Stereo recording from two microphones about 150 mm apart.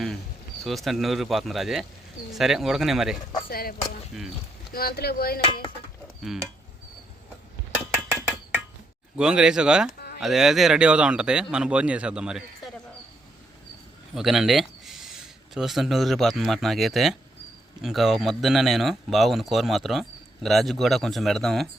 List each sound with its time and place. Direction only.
0.6 s speech: centre (ahead or behind)
3.5 s speech: 80° left
4.7 s chopping: 90° left
6.2 s speech: 5° right (ahead or behind)
9.1 s speech: 5° right (ahead or behind)
14.2 s a sound: centre (ahead or behind)
15.5 s speech: centre (ahead or behind)